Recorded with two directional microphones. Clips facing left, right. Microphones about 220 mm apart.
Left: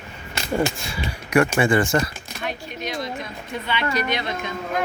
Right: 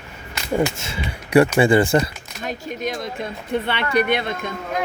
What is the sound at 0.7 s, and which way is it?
Speech, 25° right (ahead or behind).